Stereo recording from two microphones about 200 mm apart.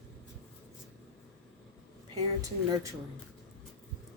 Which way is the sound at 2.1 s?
20° right (ahead or behind).